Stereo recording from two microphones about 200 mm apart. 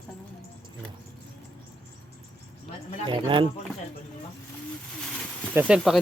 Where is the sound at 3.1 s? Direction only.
25° right (ahead or behind).